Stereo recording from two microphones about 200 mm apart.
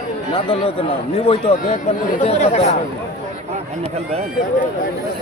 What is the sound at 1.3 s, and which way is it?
Speech, 30° left (ahead or behind).